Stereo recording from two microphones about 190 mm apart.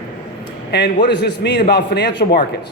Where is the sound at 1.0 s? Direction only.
60° left (ahead or behind).